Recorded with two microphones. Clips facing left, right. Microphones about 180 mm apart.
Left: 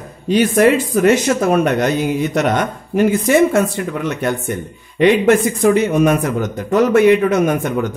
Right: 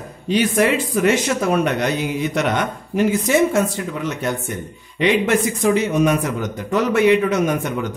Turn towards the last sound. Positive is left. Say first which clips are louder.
# left 4 dB
turn(degrees=50)  # may be behind; listen again after turning